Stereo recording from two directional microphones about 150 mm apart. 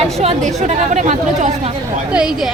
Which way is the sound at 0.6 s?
50° right (ahead or behind).